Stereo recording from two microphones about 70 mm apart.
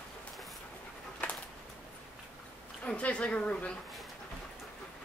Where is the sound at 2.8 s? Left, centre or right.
Centre.